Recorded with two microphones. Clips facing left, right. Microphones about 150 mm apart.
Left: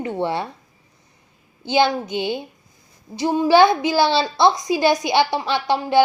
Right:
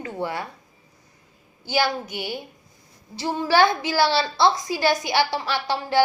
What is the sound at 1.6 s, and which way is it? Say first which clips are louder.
A woman's voice: left 5 dB; 20° left (ahead or behind).